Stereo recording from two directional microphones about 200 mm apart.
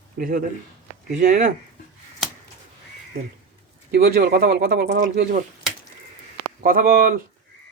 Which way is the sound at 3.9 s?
50° right (ahead or behind).